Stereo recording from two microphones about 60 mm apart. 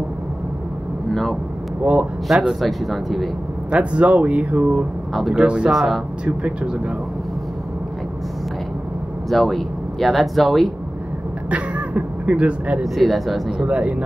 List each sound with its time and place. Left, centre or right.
1.8 s speech: right
2.2 s speech: centre
3.7 s speech: right
5.7 s speech: centre
6.2 s speech: right
9.3 s speech: centre
11.5 s speech: right
12.8 s speech: centre
13.7 s speech: right